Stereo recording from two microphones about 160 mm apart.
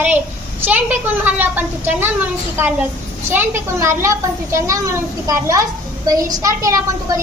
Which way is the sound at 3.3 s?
15° right (ahead or behind).